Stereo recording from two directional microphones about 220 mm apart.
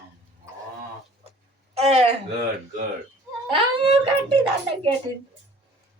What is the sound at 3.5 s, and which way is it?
Speech, 25° right (ahead or behind).